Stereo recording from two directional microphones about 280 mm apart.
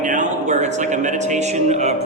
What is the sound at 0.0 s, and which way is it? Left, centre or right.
A man's voice, right.